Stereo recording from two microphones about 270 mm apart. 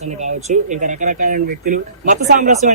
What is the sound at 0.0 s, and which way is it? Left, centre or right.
A man's voice, right.